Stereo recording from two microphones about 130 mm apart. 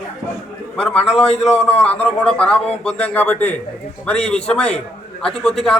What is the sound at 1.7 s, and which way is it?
A man's voice, 10° left (ahead or behind).